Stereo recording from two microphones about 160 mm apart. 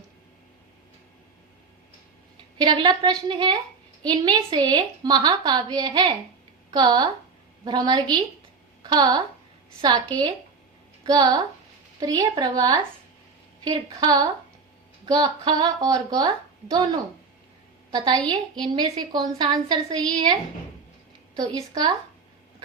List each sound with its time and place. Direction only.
2.6 s a woman's voice: 30° right (ahead or behind)
17.9 s a woman's voice: 25° right (ahead or behind)
21.3 s a woman's voice: 25° right (ahead or behind)